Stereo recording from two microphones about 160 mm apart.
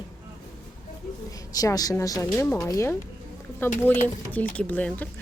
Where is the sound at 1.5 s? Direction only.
20° left (ahead or behind).